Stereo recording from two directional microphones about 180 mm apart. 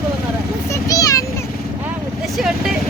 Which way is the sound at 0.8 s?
20° left (ahead or behind).